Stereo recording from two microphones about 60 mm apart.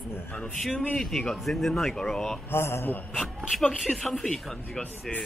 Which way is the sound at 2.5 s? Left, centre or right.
Left.